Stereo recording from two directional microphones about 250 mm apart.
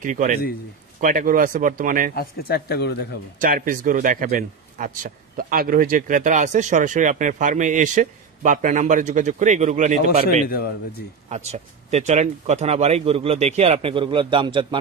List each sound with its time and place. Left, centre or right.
0.0 s speech: right
2.1 s speech: left
3.3 s speech: right
11.2 s speech: right